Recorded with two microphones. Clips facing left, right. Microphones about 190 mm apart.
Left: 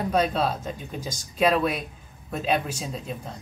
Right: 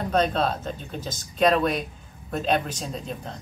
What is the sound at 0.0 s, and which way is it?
Speech, 10° left (ahead or behind).